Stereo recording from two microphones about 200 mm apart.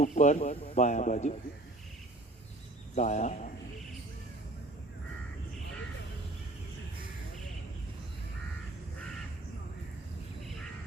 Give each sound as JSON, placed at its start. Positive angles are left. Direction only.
{"t": 0.0, "sound": "speech", "side_deg": 35}
{"t": 2.9, "sound": "speech", "side_deg": 35}